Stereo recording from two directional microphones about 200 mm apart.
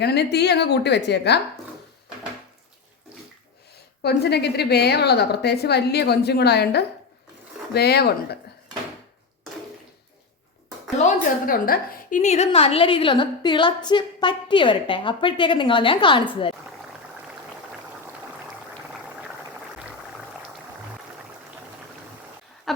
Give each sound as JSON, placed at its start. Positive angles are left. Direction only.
{"t": 0.0, "sound": "a woman's voice", "side_deg": 55}
{"t": 4.0, "sound": "a woman's voice", "side_deg": 55}
{"t": 10.9, "sound": "a sound", "side_deg": 40}
{"t": 12.5, "sound": "a woman's voice", "side_deg": 30}